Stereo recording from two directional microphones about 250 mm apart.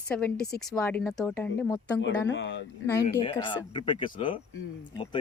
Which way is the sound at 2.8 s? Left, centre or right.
Centre.